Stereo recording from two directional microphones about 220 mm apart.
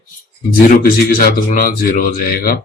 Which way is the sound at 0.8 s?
40° left (ahead or behind).